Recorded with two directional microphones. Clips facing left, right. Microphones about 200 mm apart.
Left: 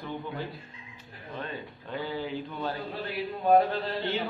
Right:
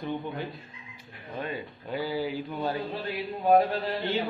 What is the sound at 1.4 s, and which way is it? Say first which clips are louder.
Speech: right 6 dB; 10° right (ahead or behind).